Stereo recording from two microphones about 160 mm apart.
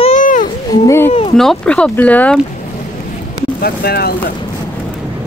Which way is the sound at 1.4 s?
5° left (ahead or behind).